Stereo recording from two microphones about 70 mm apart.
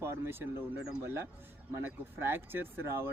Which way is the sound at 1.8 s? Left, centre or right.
Right.